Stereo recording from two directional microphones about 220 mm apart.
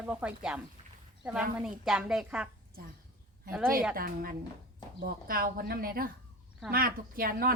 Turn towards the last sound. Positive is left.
turn(degrees=-40)  # may be behind; listen again after turning